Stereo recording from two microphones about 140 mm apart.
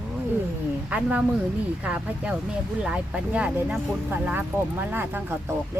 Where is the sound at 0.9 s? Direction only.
10° right (ahead or behind).